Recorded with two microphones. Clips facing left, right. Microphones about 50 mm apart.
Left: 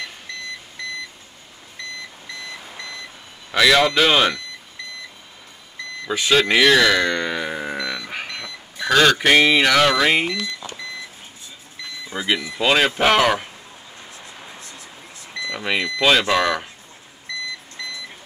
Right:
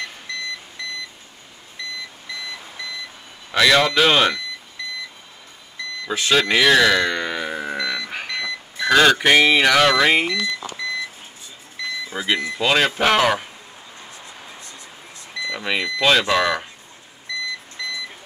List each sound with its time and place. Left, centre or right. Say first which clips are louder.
3.5 s speech: even; centre
6.0 s a sound: left 1 dB; centre
8.3 s a sound: right 6 dB; centre
8.8 s speech: right 1 dB; centre
10.2 s speech: right 2 dB; centre
12.1 s speech: left 1 dB; centre
15.5 s speech: left 1 dB; centre